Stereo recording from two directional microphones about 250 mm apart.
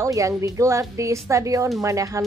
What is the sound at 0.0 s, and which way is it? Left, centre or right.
Speech, centre.